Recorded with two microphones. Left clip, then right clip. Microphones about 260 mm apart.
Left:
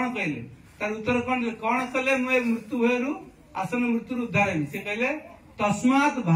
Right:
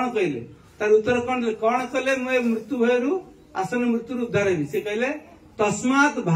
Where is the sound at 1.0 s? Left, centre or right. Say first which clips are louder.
Right 3 dB; centre.